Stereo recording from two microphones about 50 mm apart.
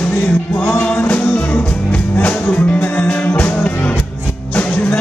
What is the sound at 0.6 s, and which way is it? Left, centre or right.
Music, left.